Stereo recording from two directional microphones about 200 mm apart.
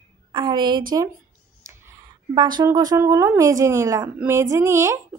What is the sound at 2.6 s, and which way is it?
A woman's voice, 20° right (ahead or behind).